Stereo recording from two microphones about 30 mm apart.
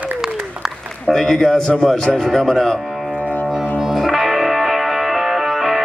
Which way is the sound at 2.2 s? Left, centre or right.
Centre.